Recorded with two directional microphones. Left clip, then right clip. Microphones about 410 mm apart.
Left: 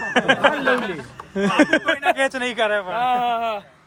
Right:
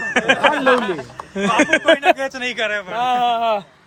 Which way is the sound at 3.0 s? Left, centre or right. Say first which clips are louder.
Right 5 dB; centre.